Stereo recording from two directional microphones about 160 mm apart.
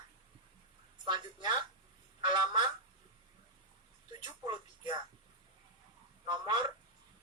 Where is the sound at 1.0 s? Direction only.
30° right (ahead or behind).